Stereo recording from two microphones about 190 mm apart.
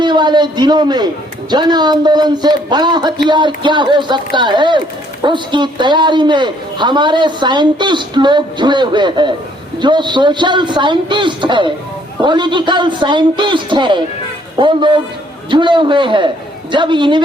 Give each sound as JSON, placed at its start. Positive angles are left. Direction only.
{"t": 0.0, "sound": "a man's voice", "side_deg": -25}